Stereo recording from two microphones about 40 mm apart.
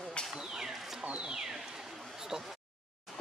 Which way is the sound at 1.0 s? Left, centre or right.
Right.